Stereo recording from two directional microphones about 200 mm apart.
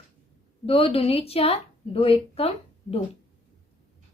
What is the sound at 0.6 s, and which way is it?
A woman's voice, 30° left (ahead or behind).